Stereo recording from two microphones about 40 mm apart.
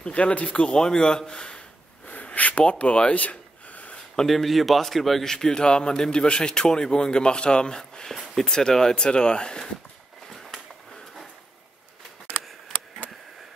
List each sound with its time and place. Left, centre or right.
0.0 s speech: left
0.6 s speech: left
2.0 s a sound: left
3.0 s gasp: left
4.3 s speech: centre
5.2 s speech: centre
10.2 s a sound: centre